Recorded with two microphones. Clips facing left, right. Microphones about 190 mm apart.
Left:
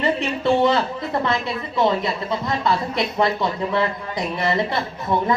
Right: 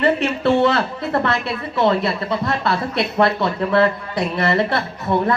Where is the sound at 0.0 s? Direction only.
65° right (ahead or behind).